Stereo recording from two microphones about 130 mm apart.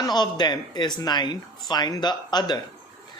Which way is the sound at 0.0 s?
35° left (ahead or behind).